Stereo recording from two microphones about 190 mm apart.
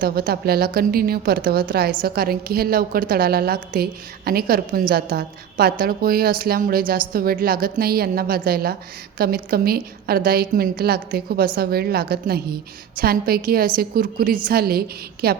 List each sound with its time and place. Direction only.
0.0 s a woman's voice: 55° right (ahead or behind)